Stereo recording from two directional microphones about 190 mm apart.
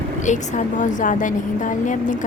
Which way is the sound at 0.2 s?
40° left (ahead or behind).